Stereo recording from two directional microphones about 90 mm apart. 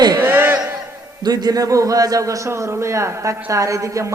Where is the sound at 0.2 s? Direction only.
25° right (ahead or behind).